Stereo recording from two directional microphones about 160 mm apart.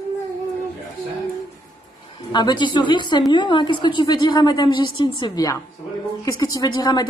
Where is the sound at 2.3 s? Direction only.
25° left (ahead or behind).